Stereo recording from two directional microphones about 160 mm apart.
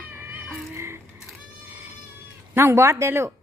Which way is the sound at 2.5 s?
15° right (ahead or behind).